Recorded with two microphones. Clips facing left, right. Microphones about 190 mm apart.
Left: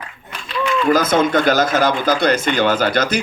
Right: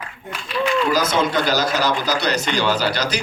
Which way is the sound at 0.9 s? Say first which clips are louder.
Left 4 dB; 50° left (ahead or behind).